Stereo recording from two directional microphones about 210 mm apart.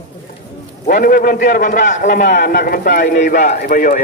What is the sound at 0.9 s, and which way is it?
Speech, 45° left (ahead or behind).